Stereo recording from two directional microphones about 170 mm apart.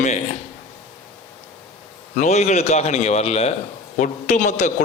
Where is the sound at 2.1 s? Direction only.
45° left (ahead or behind).